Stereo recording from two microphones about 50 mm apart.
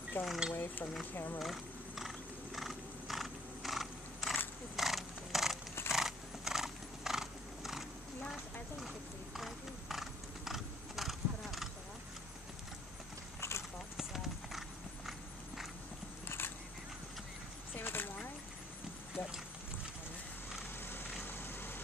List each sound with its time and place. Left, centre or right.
0.2 s speech: left
0.5 s a sound: left
1.1 s speech: left
1.4 s horse: centre
4.7 s a sound: centre
5.9 s horse: centre
13.4 s clip-clop: left
13.9 s clip-clop: centre
16.3 s a sound: left
17.7 s a sound: left
19.2 s clip-clop: left
20.8 s vehicle: left